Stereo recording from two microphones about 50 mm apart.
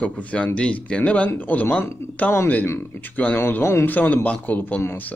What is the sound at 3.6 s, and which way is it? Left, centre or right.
Speech, left.